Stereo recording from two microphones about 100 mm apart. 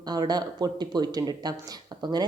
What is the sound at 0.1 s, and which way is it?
Speech, 40° right (ahead or behind).